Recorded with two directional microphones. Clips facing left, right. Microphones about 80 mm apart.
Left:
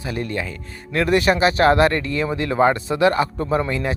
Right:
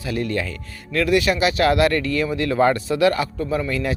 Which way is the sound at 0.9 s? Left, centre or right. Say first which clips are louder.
Left 1 dB; left.